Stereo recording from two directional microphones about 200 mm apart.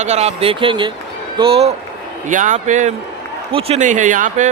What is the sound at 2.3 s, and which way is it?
A man's voice, 40° right (ahead or behind).